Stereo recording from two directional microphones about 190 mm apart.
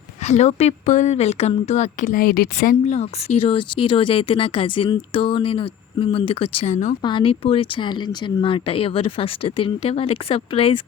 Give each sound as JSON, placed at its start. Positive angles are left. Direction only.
{"t": 0.3, "sound": "speech", "side_deg": 35}
{"t": 2.8, "sound": "speech", "side_deg": 35}